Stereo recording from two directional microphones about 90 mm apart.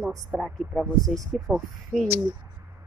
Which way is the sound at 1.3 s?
5° right (ahead or behind).